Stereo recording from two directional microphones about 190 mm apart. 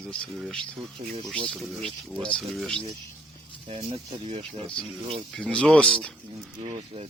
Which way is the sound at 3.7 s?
30° right (ahead or behind).